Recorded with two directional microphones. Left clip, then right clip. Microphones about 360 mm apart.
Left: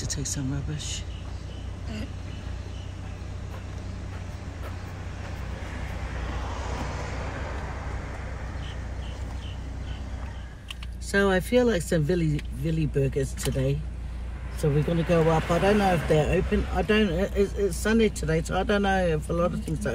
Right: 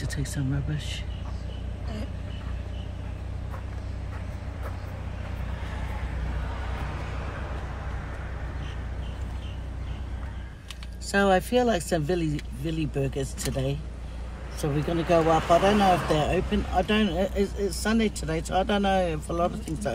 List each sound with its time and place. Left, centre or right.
0.0 s speech: centre
11.1 s speech: centre
14.7 s speech: right
16.2 s speech: centre